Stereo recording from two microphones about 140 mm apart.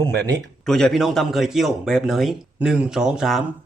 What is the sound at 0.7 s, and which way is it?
A man's voice, 5° left (ahead or behind).